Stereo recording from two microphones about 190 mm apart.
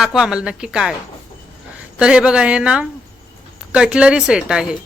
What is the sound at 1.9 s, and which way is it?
A woman's voice, 5° right (ahead or behind).